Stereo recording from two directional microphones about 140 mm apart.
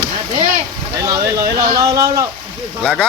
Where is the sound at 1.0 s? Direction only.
25° right (ahead or behind).